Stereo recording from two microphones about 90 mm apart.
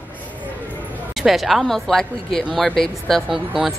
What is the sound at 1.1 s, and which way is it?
A woman's voice, 5° right (ahead or behind).